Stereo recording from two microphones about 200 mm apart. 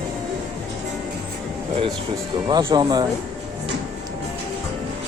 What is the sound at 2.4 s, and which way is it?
Speech, 20° right (ahead or behind).